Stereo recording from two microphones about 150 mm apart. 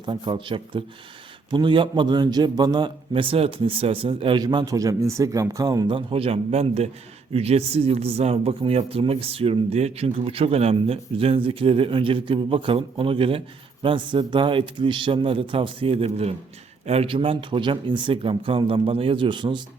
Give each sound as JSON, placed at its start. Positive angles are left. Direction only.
{"t": 0.0, "sound": "speech", "side_deg": -30}